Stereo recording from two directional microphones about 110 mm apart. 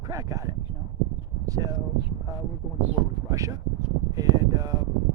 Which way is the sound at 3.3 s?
30° right (ahead or behind).